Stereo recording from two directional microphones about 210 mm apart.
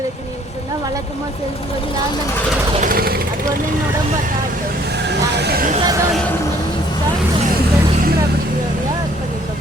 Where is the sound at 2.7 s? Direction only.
40° right (ahead or behind).